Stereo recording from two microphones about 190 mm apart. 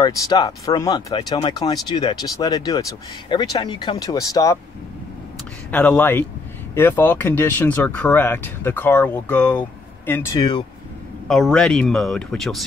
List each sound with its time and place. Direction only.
0.0 s speech: 20° left (ahead or behind)
5.7 s speech: 10° left (ahead or behind)